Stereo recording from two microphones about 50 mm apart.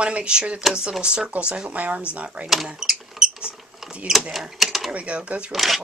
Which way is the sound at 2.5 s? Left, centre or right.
Centre.